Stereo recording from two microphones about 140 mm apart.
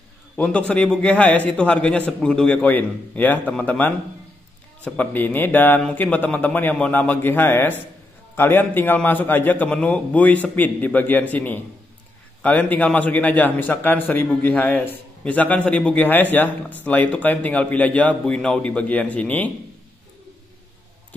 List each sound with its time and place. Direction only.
0.4 s a man's voice: 10° left (ahead or behind)